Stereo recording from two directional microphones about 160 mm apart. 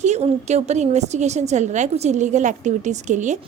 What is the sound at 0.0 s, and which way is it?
A woman's voice, 45° right (ahead or behind).